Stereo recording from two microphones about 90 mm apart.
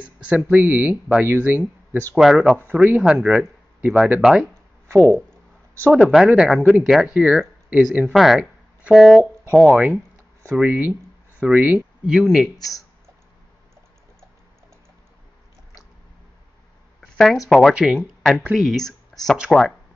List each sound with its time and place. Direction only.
0.3 s speech: 15° right (ahead or behind)
2.1 s speech: 5° right (ahead or behind)
2.7 s speech: 20° right (ahead or behind)
3.0 s speech: 5° right (ahead or behind)
4.9 s speech: 25° right (ahead or behind)
5.9 s speech: 5° right (ahead or behind)
8.1 s speech: centre (ahead or behind)
9.7 s speech: 15° right (ahead or behind)
12.5 s speech: 40° left (ahead or behind)
17.0 s a sound: 5° left (ahead or behind)
17.5 s speech: centre (ahead or behind)